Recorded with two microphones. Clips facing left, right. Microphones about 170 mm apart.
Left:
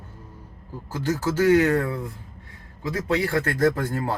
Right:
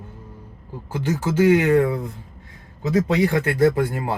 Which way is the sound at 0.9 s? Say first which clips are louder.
Right 2 dB; 15° right (ahead or behind).